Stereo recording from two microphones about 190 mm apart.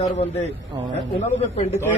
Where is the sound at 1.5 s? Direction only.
35° left (ahead or behind).